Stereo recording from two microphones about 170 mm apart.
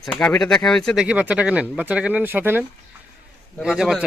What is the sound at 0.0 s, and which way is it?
Speech, 5° left (ahead or behind).